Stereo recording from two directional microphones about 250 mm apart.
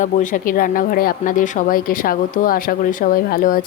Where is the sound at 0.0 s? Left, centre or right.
Left.